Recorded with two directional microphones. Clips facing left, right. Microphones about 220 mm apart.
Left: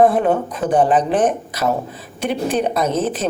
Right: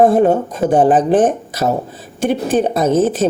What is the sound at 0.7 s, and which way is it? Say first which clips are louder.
A woman's voice: right 4 dB; 45° right (ahead or behind).